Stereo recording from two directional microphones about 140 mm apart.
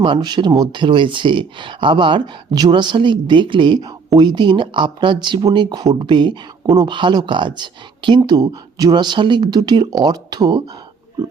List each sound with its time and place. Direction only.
0.0 s speech: 35° right (ahead or behind)